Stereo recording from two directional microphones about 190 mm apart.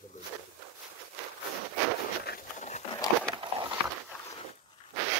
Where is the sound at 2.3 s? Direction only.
45° left (ahead or behind).